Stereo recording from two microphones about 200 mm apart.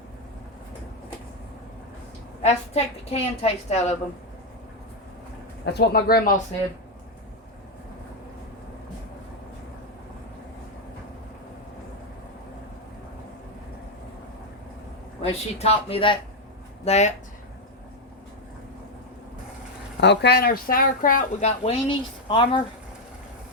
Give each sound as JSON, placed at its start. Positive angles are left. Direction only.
{"t": 2.4, "sound": "a woman's voice", "side_deg": 30}
{"t": 5.7, "sound": "speech", "side_deg": 50}
{"t": 15.2, "sound": "a woman's voice", "side_deg": 30}
{"t": 20.0, "sound": "speech", "side_deg": 60}